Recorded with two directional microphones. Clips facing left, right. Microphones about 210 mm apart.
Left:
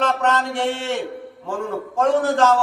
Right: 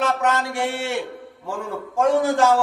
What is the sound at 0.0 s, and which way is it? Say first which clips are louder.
Speech: left 1 dB; 10° right (ahead or behind).